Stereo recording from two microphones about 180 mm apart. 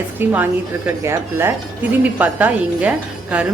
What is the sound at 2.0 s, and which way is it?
A woman's voice, 10° right (ahead or behind).